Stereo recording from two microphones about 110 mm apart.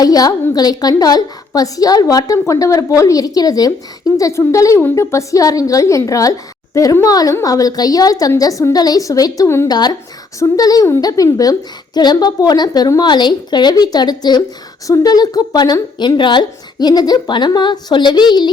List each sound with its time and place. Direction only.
0.0 s a woman's voice: 35° left (ahead or behind)